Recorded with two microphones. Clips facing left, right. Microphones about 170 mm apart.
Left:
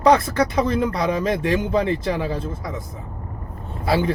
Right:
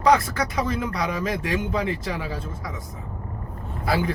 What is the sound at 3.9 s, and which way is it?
Speech, 25° left (ahead or behind).